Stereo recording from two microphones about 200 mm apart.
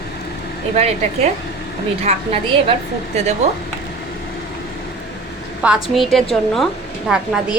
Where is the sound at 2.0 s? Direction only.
30° right (ahead or behind).